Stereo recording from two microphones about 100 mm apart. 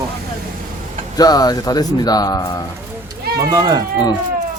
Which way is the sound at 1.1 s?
40° left (ahead or behind).